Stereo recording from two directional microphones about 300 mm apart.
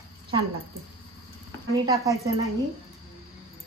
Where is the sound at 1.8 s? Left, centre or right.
Centre.